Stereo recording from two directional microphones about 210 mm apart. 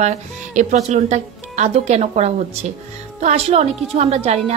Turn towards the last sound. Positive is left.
turn(degrees=-30)  # may be behind; listen again after turning